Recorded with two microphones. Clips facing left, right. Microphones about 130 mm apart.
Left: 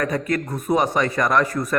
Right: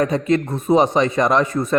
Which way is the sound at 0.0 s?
25° right (ahead or behind).